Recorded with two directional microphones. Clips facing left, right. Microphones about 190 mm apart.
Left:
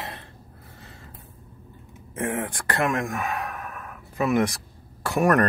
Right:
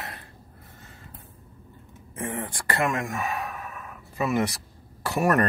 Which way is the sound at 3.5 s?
55° left (ahead or behind).